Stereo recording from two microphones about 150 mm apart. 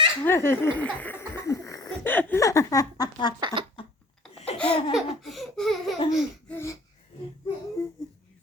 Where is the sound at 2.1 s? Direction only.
20° left (ahead or behind).